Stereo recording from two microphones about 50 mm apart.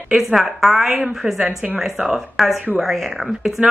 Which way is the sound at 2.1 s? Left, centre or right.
Centre.